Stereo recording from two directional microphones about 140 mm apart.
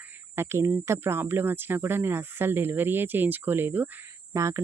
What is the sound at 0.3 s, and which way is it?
Speech, 20° right (ahead or behind).